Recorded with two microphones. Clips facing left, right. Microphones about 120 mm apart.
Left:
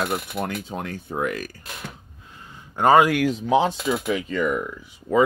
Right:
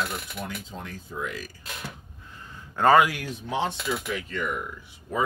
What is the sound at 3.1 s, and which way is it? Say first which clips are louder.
Speech: left 12 dB; 90° left.